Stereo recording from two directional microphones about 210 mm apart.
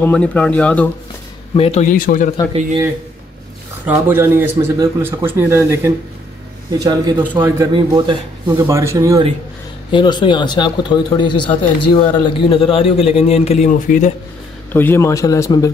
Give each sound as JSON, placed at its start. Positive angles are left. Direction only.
{"t": 0.0, "sound": "a man's voice", "side_deg": 5}
{"t": 1.6, "sound": "a man's voice", "side_deg": 30}
{"t": 3.8, "sound": "a man's voice", "side_deg": -10}
{"t": 6.8, "sound": "a man's voice", "side_deg": -20}
{"t": 9.8, "sound": "speech", "side_deg": 20}
{"t": 14.7, "sound": "a man's voice", "side_deg": 10}